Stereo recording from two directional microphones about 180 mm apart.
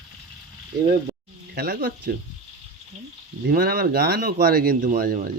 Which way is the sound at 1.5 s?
55° right (ahead or behind).